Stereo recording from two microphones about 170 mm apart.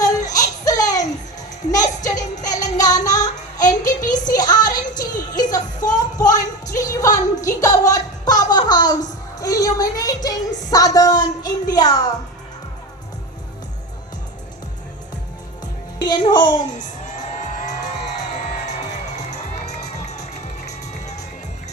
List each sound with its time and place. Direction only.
0.0 s music: 20° left (ahead or behind)
2.4 s child singing: 20° left (ahead or behind)
5.9 s music: 20° left (ahead or behind)
15.6 s music: 25° left (ahead or behind)
16.7 s music: 45° left (ahead or behind)
19.1 s music: 40° left (ahead or behind)